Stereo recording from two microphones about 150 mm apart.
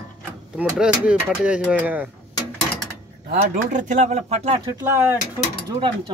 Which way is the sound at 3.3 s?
55° right (ahead or behind).